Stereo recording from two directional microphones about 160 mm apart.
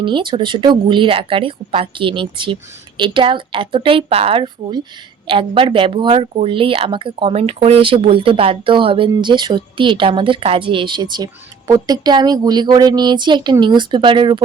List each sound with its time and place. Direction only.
0.0 s speech: 30° right (ahead or behind)